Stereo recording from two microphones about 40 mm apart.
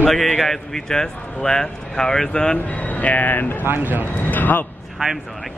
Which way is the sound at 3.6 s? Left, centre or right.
Right.